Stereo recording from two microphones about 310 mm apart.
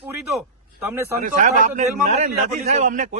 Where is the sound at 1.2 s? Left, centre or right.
Right.